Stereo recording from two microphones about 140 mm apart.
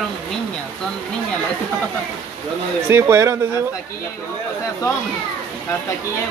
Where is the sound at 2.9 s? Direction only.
20° right (ahead or behind).